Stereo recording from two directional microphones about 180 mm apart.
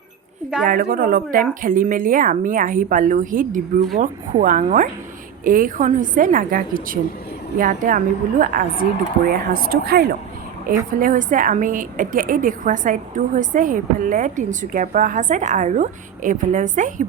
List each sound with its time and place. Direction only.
0.6 s a woman's voice: 50° right (ahead or behind)
11.0 s a woman's voice: 45° right (ahead or behind)